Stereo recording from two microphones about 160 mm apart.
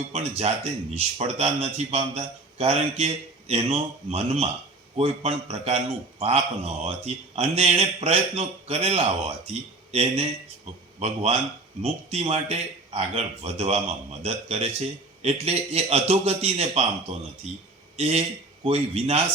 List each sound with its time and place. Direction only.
0.1 s a man's voice: 40° right (ahead or behind)